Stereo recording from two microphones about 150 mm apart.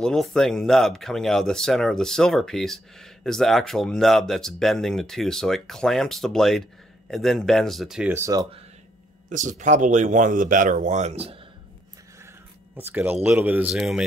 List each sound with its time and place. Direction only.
0.0 s speech: 5° left (ahead or behind)
8.1 s speech: 20° right (ahead or behind)
9.3 s speech: 55° right (ahead or behind); by 11.4 s 40° right (ahead or behind)
12.7 s speech: 15° right (ahead or behind)